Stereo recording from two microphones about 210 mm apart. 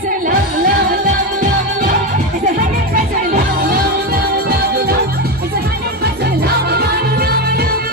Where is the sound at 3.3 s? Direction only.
45° right (ahead or behind).